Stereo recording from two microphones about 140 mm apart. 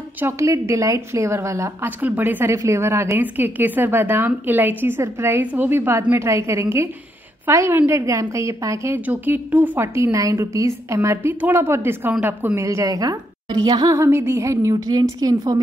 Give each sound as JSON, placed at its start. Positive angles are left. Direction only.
{"t": 0.2, "sound": "a woman's voice", "side_deg": -20}